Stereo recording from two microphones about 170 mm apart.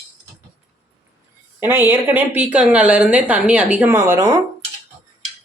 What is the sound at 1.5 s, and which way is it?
Speech, 15° right (ahead or behind).